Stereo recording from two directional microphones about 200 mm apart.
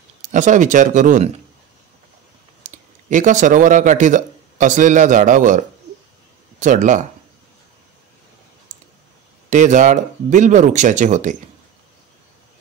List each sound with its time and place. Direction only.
0.2 s speech: 40° right (ahead or behind)
2.6 s speech: 40° right (ahead or behind)
8.7 s clicking: 40° right (ahead or behind)
9.5 s speech: 35° right (ahead or behind)